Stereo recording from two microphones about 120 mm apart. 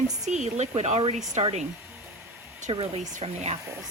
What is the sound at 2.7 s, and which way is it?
Speech, 55° right (ahead or behind).